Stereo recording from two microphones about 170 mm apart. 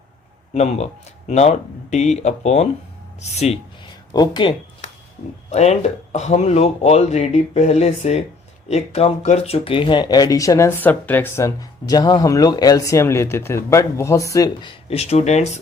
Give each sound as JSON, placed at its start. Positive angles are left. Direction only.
{"t": 0.5, "sound": "speech", "side_deg": 40}
{"t": 4.1, "sound": "speech", "side_deg": 25}
{"t": 5.5, "sound": "speech", "side_deg": 40}